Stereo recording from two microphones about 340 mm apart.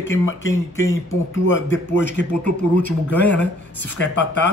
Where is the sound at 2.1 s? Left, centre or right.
Centre.